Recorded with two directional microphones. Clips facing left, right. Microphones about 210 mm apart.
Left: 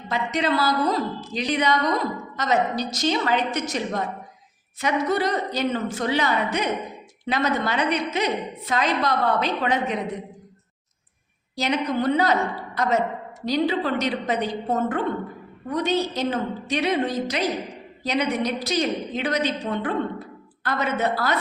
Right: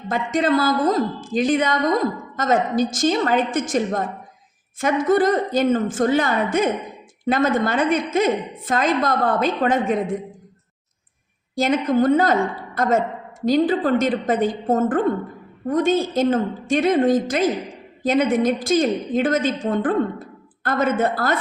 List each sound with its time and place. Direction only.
0.1 s a woman's voice: 50° right (ahead or behind)
11.5 s a woman's voice: 50° right (ahead or behind)